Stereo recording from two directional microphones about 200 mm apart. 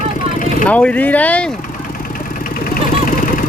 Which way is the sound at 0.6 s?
5° left (ahead or behind).